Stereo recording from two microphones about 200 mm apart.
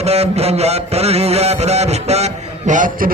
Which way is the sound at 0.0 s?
30° right (ahead or behind).